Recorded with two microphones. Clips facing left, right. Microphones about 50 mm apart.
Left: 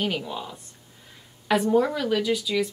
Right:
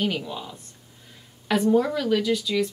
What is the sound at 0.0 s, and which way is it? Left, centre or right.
Speech, centre.